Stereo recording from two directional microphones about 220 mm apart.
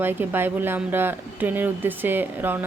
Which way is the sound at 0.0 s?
10° right (ahead or behind).